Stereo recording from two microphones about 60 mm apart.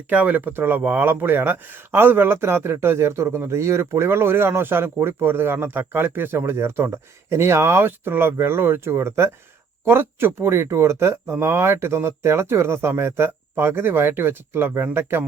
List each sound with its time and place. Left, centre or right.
0.1 s a man's voice: right